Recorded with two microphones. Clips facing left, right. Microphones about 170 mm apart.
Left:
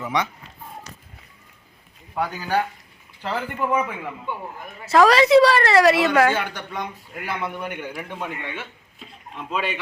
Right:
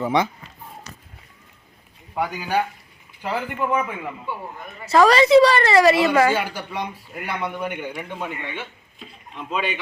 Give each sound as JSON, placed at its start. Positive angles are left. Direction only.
{"t": 0.0, "sound": "speech", "side_deg": -30}
{"t": 2.3, "sound": "a man's voice", "side_deg": -15}
{"t": 3.6, "sound": "a woman's voice", "side_deg": 0}